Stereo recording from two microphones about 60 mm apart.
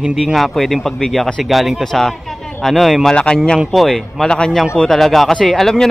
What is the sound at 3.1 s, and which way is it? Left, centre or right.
Speech, centre.